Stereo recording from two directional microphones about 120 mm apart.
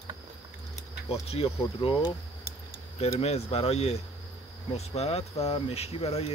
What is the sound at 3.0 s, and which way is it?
Speech, 55° left (ahead or behind).